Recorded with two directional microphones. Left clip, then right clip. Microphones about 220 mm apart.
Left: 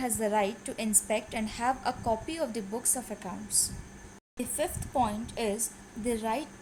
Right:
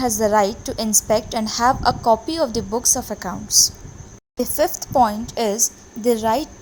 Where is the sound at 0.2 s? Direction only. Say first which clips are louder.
Right 11 dB; 20° right (ahead or behind).